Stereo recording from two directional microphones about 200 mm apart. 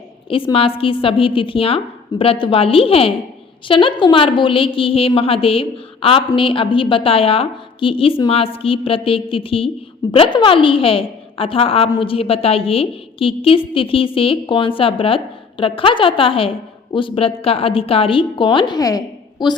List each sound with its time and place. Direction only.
0.3 s a woman's voice: 25° left (ahead or behind)